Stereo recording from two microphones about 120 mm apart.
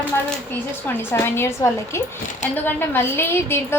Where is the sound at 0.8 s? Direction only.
20° left (ahead or behind).